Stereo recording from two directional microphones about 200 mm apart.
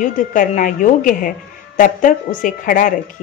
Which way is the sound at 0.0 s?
40° left (ahead or behind).